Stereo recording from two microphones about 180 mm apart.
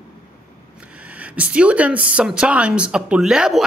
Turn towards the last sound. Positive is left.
turn(degrees=-5)  # may be behind; listen again after turning